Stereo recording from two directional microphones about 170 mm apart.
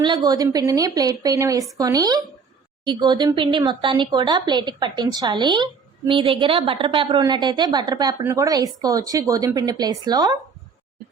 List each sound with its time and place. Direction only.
0.0 s speech: 25° right (ahead or behind)